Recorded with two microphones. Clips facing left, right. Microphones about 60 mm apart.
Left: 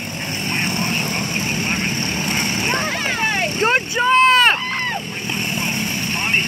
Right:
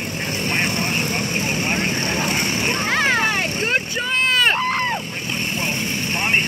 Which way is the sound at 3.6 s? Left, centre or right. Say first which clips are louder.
Left 6 dB; left.